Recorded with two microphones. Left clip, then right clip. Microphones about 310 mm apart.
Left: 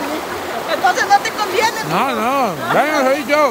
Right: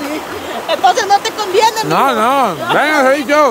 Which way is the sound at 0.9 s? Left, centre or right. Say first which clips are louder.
Right 2 dB; right.